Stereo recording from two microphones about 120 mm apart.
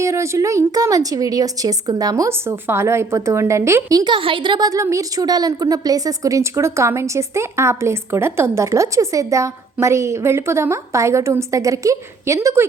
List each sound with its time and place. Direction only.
0.0 s a woman's voice: 25° right (ahead or behind)